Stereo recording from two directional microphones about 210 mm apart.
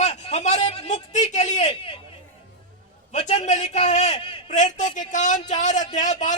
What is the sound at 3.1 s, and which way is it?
A man's voice, 35° left (ahead or behind).